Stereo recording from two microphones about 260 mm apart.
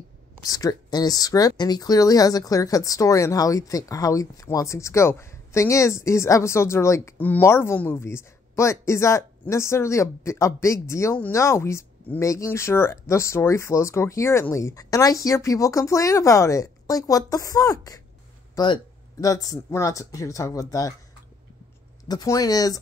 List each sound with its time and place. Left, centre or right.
0.4 s speech: centre
18.5 s a sound: centre
19.2 s speech: centre
22.0 s speech: centre